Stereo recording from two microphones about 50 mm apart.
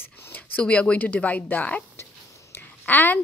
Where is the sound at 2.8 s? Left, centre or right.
Left.